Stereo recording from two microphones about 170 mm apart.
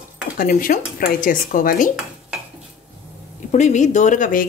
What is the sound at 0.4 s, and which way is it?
Speech, 55° left (ahead or behind).